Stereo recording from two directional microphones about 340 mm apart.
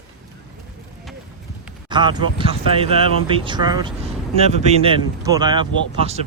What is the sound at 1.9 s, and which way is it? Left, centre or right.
Speech, centre.